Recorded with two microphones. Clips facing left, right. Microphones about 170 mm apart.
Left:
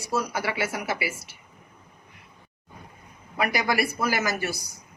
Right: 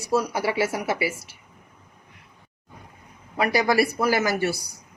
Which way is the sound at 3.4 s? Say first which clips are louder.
Right 4 dB; 35° right (ahead or behind).